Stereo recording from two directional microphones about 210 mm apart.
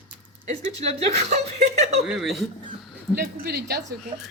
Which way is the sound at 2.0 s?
Centre (ahead or behind).